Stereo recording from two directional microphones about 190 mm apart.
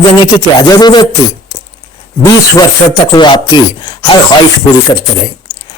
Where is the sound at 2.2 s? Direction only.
20° left (ahead or behind).